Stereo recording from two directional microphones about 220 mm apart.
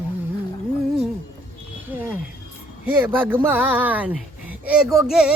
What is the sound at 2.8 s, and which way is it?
Speech, 10° right (ahead or behind).